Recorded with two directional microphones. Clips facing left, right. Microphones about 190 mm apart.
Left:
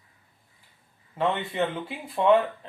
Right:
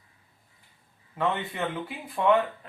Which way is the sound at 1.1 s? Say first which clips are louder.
Left 3 dB; 25° left (ahead or behind).